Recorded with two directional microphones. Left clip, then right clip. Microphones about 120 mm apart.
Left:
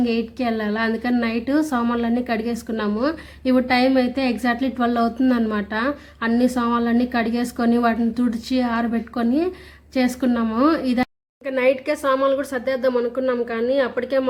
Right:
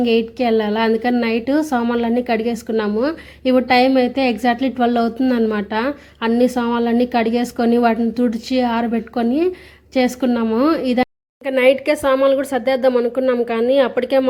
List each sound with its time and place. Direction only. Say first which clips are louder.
0.0 s a woman's voice: right 6 dB; 30° right (ahead or behind)